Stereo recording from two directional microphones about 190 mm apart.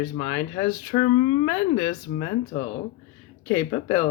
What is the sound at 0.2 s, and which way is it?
Speech, 20° left (ahead or behind).